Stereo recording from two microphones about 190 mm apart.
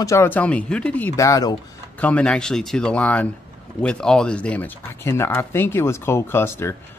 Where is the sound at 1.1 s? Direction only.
15° left (ahead or behind).